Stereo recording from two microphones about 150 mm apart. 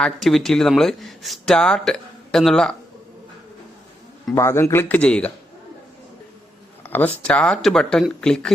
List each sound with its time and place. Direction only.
0.0 s speech: centre (ahead or behind)
4.4 s speech: 20° left (ahead or behind)
6.8 s speech: 10° left (ahead or behind)